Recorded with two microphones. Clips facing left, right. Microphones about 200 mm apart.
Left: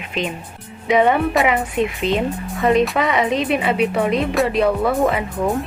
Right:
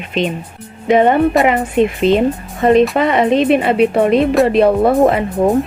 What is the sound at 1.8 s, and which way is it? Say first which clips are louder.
Speech: right 9 dB; 25° right (ahead or behind).